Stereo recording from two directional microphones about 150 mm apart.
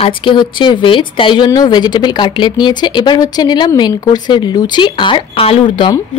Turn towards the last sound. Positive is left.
turn(degrees=30)  # may be behind; listen again after turning